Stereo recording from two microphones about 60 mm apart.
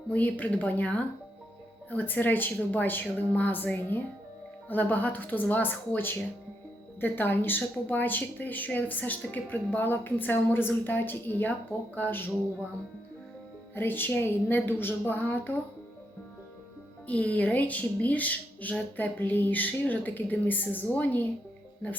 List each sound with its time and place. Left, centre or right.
0.1 s a woman's voice: left
13.7 s a woman's voice: left
17.1 s a woman's voice: left